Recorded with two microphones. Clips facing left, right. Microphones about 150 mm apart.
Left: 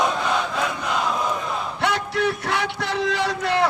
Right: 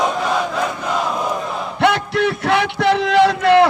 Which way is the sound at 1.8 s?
65° right (ahead or behind).